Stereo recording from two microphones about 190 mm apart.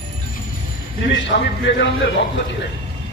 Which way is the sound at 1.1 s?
70° left (ahead or behind).